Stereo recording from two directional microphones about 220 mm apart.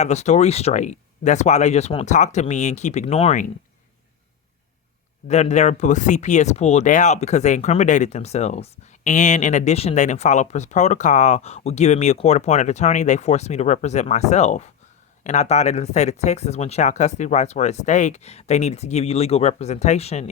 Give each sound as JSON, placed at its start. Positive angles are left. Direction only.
{"t": 0.0, "sound": "speech", "side_deg": 30}
{"t": 5.3, "sound": "speech", "side_deg": 30}